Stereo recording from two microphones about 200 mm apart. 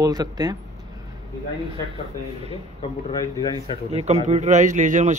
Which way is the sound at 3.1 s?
20° left (ahead or behind).